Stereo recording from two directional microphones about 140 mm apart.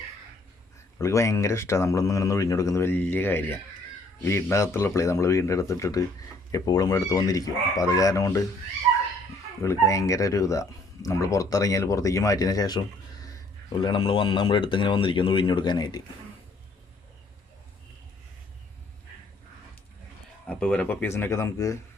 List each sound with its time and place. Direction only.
0.9 s speech: 20° left (ahead or behind)
9.6 s speech: 20° left (ahead or behind)
13.8 s speech: 35° left (ahead or behind)
20.5 s speech: 5° left (ahead or behind)